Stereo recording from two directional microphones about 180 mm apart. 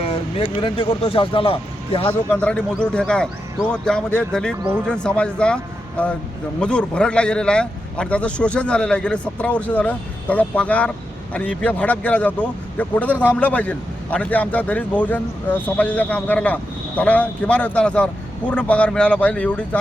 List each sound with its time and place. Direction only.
0.0 s speech: 30° left (ahead or behind)
2.0 s a man's voice: 5° left (ahead or behind)
6.6 s a man's voice: 5° left (ahead or behind)